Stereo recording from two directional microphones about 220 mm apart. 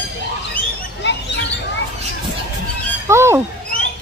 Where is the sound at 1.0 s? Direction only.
50° left (ahead or behind).